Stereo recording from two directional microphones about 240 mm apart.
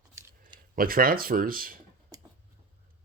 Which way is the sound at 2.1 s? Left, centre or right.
Centre.